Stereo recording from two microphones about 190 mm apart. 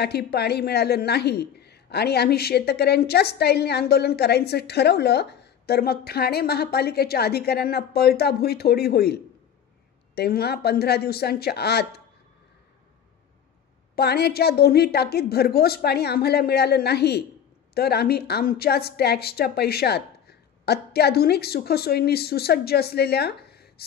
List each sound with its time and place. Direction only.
0.0 s a woman's voice: 60° left (ahead or behind)
13.9 s a woman's voice: 55° left (ahead or behind)